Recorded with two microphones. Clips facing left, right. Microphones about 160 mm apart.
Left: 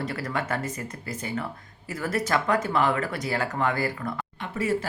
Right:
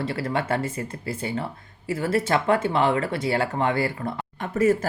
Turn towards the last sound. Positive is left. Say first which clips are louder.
# right 6 dB
turn(degrees=-45)  # may be behind; listen again after turning